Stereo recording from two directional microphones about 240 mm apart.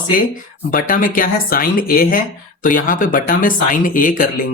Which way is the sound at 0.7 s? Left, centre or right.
Left.